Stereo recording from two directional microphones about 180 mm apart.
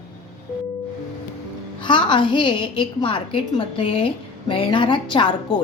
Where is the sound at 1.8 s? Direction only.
25° left (ahead or behind).